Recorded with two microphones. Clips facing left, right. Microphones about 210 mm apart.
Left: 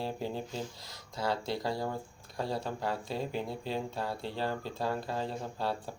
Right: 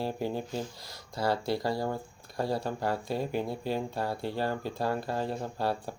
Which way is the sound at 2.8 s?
60° right (ahead or behind).